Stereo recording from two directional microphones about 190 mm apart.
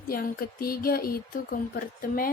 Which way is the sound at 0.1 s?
50° left (ahead or behind).